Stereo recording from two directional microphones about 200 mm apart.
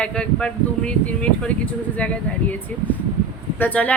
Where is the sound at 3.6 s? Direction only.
5° left (ahead or behind).